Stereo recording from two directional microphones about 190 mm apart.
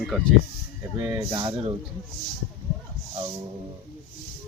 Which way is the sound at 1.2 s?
25° right (ahead or behind).